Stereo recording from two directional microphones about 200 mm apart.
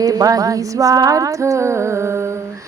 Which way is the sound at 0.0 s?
15° right (ahead or behind).